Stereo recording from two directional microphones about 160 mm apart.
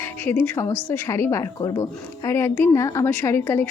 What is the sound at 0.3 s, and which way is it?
A woman's voice, 15° left (ahead or behind).